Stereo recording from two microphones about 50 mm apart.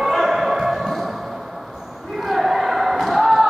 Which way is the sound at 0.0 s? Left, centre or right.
Centre.